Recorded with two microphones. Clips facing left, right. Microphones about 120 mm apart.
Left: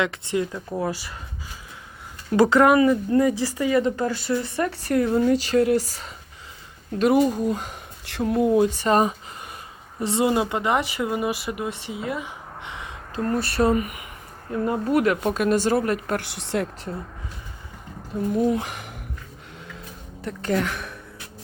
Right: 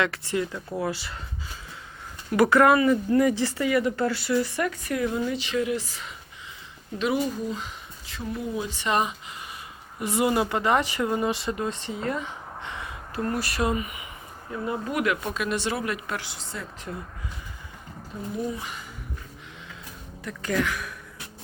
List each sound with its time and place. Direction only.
0.0 s speech: 20° left (ahead or behind)
2.3 s speech: 25° left (ahead or behind)
3.7 s speech: 25° left (ahead or behind)
4.6 s a woman's voice: 40° left (ahead or behind)
8.0 s speech: 70° left (ahead or behind); by 9.1 s 40° left (ahead or behind)
10.0 s speech: 25° left (ahead or behind)
13.2 s a woman's voice: 30° left (ahead or behind)
13.7 s speech: 50° left (ahead or behind)
16.2 s speech: 70° left (ahead or behind)
18.4 s speech: 60° left (ahead or behind)
20.2 s a woman's voice: 30° left (ahead or behind)